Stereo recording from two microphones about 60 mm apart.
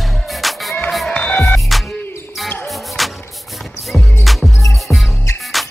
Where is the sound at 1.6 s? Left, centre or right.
Centre.